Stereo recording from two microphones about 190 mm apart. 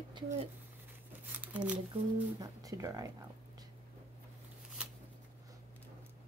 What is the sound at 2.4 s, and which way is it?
Speech, 20° right (ahead or behind).